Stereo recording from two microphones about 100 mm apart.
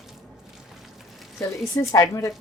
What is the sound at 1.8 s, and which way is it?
Speech, 35° left (ahead or behind).